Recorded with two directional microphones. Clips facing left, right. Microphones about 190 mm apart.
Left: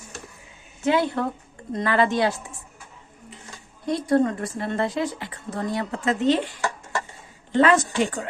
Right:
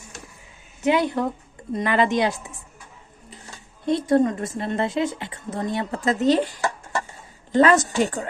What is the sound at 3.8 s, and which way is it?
A woman's voice, 25° right (ahead or behind).